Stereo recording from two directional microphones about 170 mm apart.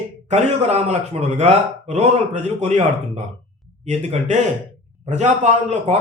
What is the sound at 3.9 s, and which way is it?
A man's voice, 45° right (ahead or behind).